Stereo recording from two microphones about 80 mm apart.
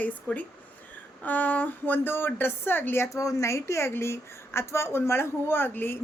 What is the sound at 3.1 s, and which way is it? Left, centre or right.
A woman's voice, left.